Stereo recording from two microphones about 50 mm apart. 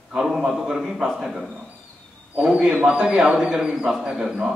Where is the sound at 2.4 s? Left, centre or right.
Centre.